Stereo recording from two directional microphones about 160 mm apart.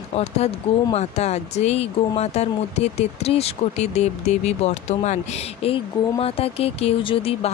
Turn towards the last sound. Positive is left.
turn(degrees=35)  # may be behind; listen again after turning